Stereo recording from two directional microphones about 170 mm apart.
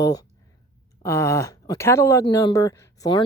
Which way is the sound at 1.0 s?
15° left (ahead or behind).